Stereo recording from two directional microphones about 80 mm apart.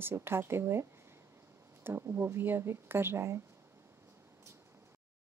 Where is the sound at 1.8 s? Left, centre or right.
Right.